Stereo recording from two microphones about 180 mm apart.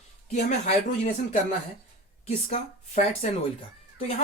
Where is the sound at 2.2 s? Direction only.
40° left (ahead or behind).